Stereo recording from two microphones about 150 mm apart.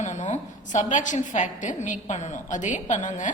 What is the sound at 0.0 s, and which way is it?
A woman's voice, 50° left (ahead or behind).